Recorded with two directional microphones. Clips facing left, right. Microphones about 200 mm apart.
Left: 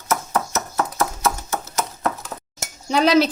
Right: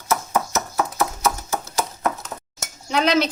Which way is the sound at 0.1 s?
10° right (ahead or behind).